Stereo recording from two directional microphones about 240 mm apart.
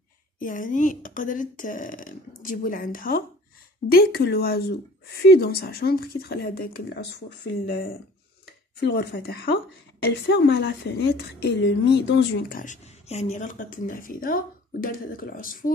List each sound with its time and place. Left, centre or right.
0.4 s a woman's voice: left